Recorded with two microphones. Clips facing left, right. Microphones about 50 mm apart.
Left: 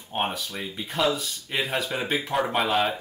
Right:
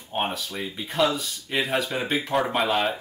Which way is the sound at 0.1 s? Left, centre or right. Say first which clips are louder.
Right 1 dB; centre.